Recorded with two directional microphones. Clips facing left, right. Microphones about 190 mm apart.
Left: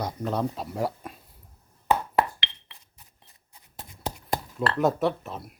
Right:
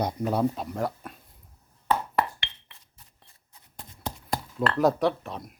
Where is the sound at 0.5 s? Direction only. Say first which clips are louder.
Left 1 dB; 5° left (ahead or behind).